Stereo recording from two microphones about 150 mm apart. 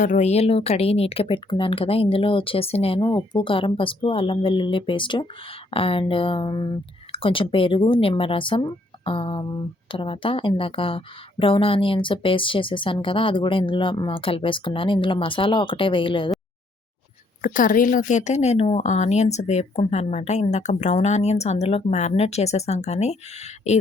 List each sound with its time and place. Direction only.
0.0 s speech: 55° left (ahead or behind); by 16.3 s 35° left (ahead or behind)
17.4 s speech: 65° left (ahead or behind); by 23.7 s 50° left (ahead or behind)